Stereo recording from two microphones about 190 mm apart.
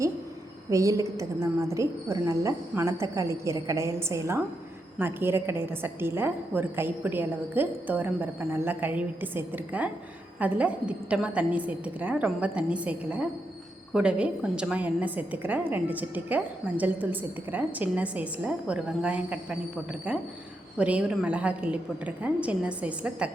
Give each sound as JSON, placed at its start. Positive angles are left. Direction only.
{"t": 0.7, "sound": "a woman's voice", "side_deg": -15}